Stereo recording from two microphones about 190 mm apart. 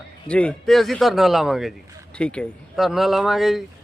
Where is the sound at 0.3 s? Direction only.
5° left (ahead or behind).